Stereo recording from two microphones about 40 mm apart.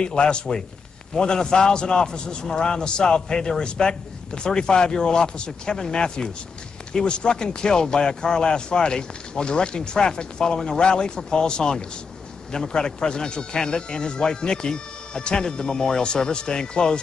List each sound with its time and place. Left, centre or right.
0.0 s speech: left